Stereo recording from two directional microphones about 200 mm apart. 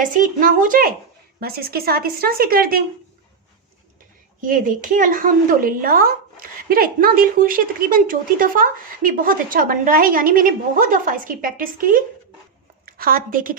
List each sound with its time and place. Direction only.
0.0 s speech: 40° right (ahead or behind)
4.4 s a woman's voice: 45° right (ahead or behind)